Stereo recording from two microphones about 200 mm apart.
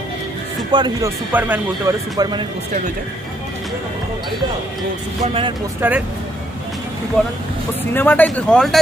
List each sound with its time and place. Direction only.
0.7 s speech: 20° right (ahead or behind)
1.3 s speech: 10° right (ahead or behind)
2.1 s speech: 20° right (ahead or behind)
5.2 s speech: 30° right (ahead or behind)
5.8 s speech: 10° right (ahead or behind)
7.2 s speech: 5° left (ahead or behind)